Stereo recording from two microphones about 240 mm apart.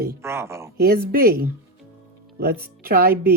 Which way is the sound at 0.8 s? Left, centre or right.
Right.